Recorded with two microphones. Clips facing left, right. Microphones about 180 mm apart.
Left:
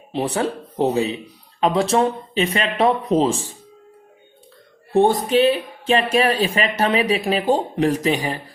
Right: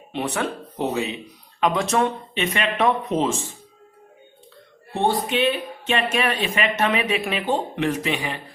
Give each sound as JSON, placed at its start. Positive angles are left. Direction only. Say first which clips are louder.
{"t": 0.1, "sound": "speech", "louder": "left 4 dB", "side_deg": 35}
{"t": 4.9, "sound": "speech", "louder": "left 6 dB", "side_deg": 40}